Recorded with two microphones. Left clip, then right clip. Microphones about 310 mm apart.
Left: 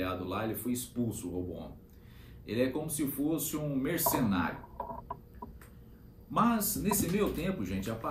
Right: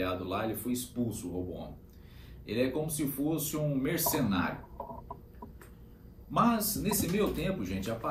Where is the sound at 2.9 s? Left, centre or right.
Centre.